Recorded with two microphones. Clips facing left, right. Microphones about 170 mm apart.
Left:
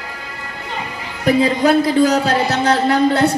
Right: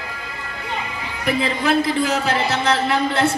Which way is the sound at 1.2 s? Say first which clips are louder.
Left 7 dB; 35° left (ahead or behind).